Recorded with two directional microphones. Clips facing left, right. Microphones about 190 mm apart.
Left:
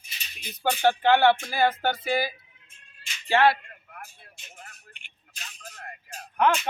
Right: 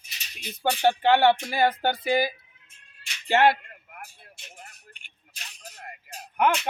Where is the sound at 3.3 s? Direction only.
20° right (ahead or behind).